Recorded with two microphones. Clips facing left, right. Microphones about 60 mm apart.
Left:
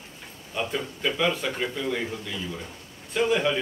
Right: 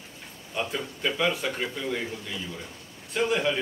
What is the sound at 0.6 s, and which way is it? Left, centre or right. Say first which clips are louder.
Speech: left 1 dB; centre.